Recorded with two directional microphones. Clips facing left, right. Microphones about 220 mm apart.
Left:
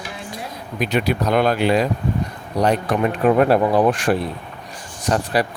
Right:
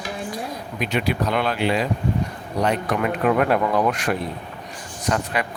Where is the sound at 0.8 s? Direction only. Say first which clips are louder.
Left 3 dB; 40° left (ahead or behind).